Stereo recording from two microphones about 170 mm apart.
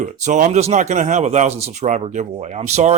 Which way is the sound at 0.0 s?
45° right (ahead or behind).